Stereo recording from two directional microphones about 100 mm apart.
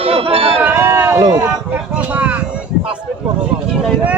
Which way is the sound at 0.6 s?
20° right (ahead or behind).